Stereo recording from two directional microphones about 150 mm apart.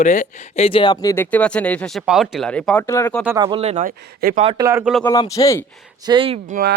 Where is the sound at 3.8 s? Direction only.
65° right (ahead or behind).